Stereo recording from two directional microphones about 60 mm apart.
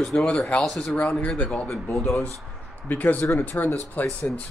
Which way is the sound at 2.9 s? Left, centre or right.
Left.